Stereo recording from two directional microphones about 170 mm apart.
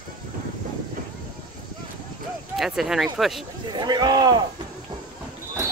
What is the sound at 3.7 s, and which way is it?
Speech, 25° right (ahead or behind).